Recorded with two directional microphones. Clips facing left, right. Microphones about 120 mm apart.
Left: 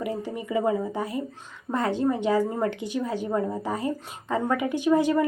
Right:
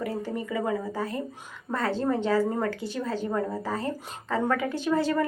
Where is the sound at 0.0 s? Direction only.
15° left (ahead or behind).